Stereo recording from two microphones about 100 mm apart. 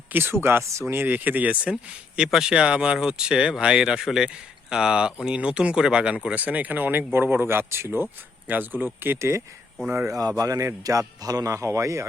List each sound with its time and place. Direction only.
0.1 s speech: 20° right (ahead or behind)
9.7 s speech: 10° right (ahead or behind)
10.1 s a man's voice: 40° right (ahead or behind)